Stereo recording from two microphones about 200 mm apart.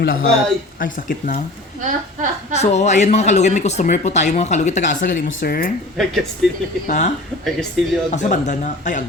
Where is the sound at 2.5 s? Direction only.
35° left (ahead or behind).